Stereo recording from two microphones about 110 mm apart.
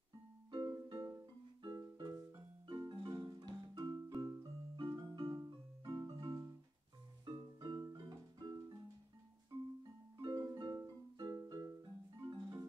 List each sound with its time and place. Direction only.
0.5 s music: 40° right (ahead or behind)
10.2 s music: 35° right (ahead or behind)